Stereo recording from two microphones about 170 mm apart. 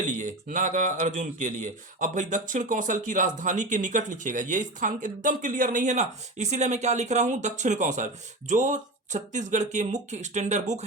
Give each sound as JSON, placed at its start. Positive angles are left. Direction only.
{"t": 0.0, "sound": "speech", "side_deg": -50}